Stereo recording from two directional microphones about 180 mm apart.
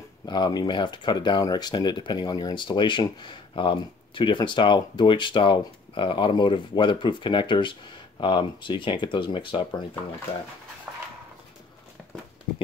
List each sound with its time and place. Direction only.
0.3 s speech: 25° left (ahead or behind)